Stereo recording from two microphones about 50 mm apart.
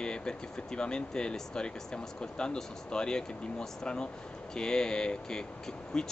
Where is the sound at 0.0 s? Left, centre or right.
Centre.